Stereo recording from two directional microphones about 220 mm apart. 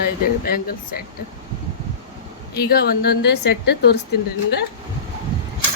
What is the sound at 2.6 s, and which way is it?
A woman's voice, 45° left (ahead or behind).